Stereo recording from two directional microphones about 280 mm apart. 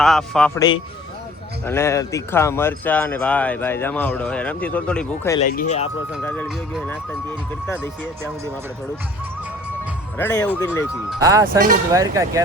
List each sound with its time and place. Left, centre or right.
0.0 s speech: centre
1.6 s speech: centre
5.4 s speech: left
6.2 s speech: centre
10.2 s speech: centre
11.2 s speech: centre
11.4 s speech: right
11.9 s speech: centre